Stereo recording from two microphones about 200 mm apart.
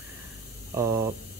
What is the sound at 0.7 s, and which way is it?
Speech, 15° right (ahead or behind).